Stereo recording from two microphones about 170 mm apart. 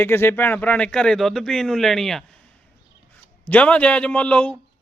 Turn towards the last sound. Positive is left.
turn(degrees=10)  # may be behind; listen again after turning